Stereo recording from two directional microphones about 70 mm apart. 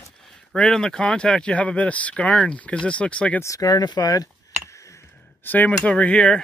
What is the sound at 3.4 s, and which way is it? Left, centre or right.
Speech, left.